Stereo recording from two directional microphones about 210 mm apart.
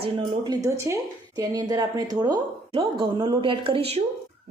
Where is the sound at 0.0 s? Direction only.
25° right (ahead or behind).